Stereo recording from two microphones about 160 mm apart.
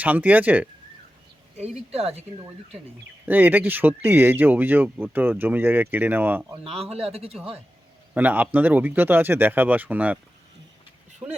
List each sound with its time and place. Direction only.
0.0 s speech: 10° right (ahead or behind)
1.5 s speech: 40° right (ahead or behind)
3.2 s speech: 10° right (ahead or behind)
6.5 s speech: 35° right (ahead or behind)
8.1 s speech: 10° right (ahead or behind)
11.2 s speech: 10° right (ahead or behind)